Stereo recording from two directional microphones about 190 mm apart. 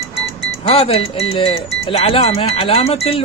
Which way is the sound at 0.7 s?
30° left (ahead or behind).